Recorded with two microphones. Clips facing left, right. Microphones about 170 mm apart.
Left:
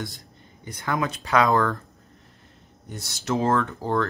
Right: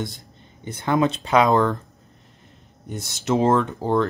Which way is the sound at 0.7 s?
25° right (ahead or behind).